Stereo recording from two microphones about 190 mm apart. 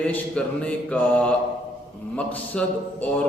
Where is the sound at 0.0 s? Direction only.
5° left (ahead or behind).